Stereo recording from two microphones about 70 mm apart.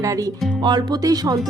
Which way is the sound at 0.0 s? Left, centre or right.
Right.